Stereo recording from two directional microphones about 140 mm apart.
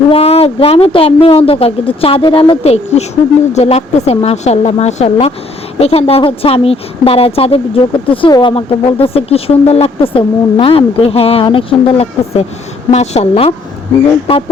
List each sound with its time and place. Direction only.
0.1 s speech: 45° left (ahead or behind)